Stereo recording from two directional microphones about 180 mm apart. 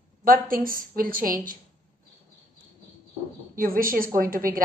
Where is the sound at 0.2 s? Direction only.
55° right (ahead or behind).